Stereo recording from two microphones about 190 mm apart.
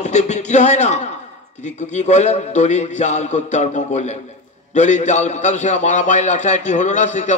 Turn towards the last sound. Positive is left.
turn(degrees=40)  # may be behind; listen again after turning